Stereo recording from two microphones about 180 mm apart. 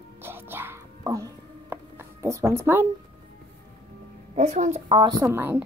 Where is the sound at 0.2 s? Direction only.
10° right (ahead or behind).